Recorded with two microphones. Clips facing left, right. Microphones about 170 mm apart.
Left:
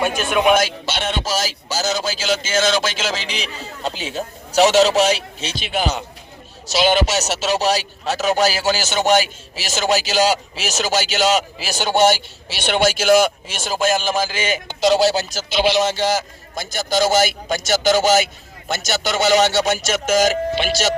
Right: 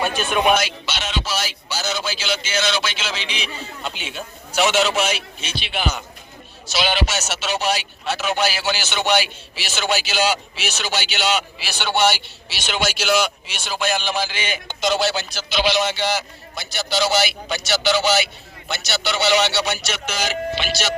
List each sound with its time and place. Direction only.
0.0 s speech: 10° left (ahead or behind)
0.5 s a man's voice: 50° left (ahead or behind)